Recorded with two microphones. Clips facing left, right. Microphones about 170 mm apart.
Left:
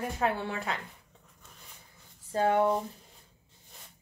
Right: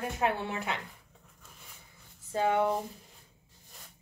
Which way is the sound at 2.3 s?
40° left (ahead or behind).